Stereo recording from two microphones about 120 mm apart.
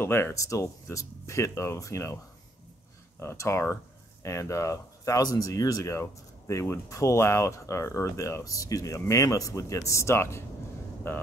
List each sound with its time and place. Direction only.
0.0 s speech: 20° left (ahead or behind)
3.2 s speech: 25° left (ahead or behind)